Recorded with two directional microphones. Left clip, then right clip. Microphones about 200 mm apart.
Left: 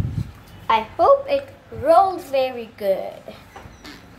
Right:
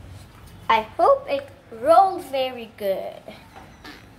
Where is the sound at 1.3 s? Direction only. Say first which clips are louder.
Left 4 dB; 5° left (ahead or behind).